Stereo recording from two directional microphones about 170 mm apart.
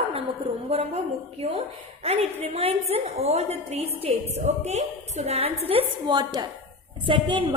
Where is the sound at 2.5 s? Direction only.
40° right (ahead or behind).